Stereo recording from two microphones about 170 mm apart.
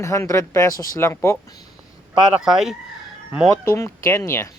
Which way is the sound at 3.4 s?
15° left (ahead or behind).